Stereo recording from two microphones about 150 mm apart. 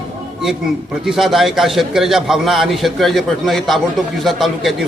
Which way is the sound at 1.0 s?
Centre (ahead or behind).